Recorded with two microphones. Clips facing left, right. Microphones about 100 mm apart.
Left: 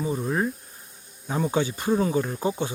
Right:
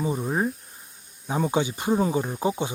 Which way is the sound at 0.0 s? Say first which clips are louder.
Even; 20° right (ahead or behind).